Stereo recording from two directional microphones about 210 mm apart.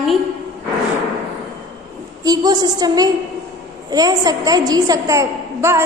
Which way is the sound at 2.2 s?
20° right (ahead or behind).